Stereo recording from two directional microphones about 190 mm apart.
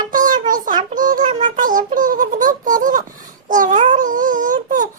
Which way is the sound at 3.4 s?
45° right (ahead or behind).